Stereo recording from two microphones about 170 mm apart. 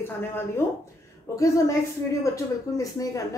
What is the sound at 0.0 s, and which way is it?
Speech, 15° left (ahead or behind).